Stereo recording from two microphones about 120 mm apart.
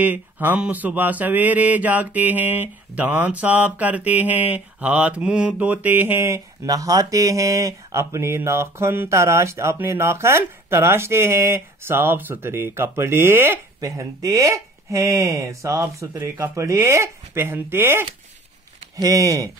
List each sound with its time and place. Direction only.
0.0 s mantra: 15° right (ahead or behind)
18.9 s mantra: 30° right (ahead or behind)